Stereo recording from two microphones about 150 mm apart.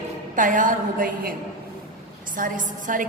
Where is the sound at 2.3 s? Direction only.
60° right (ahead or behind).